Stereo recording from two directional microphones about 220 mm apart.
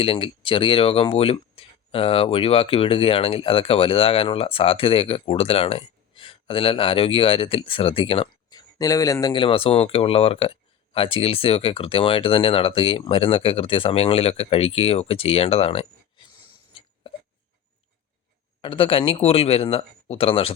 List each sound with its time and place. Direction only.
0.0 s speech: 25° left (ahead or behind)
18.6 s speech: 25° left (ahead or behind)